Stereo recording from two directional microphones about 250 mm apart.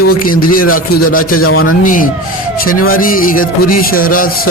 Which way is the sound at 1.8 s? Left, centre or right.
Left.